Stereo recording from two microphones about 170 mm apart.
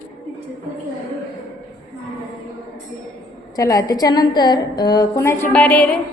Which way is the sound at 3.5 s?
20° left (ahead or behind).